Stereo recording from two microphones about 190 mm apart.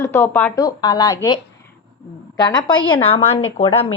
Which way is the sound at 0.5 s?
20° left (ahead or behind).